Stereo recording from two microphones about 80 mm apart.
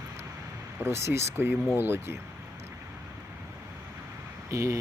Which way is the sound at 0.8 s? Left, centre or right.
Right.